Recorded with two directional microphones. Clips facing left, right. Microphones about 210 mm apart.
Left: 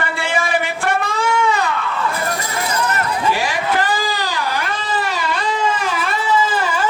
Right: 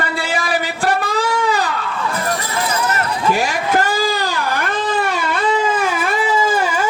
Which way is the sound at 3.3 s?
45° right (ahead or behind).